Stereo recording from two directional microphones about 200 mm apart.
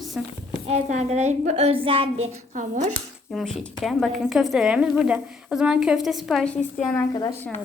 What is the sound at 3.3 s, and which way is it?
A woman's voice, centre (ahead or behind).